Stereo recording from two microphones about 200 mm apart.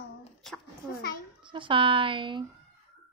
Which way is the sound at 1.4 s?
25° right (ahead or behind).